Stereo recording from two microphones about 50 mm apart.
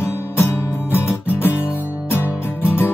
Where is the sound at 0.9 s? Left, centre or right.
Left.